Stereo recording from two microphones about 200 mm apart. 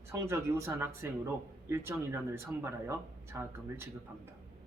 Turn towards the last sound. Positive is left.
turn(degrees=-10)  # may be behind; listen again after turning